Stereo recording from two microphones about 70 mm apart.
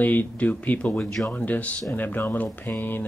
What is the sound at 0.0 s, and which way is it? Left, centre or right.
Speech, left.